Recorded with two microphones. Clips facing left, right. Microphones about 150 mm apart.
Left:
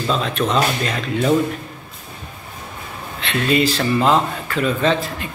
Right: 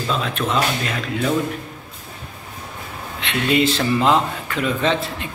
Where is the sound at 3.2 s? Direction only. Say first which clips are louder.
Left 1 dB; 15° right (ahead or behind).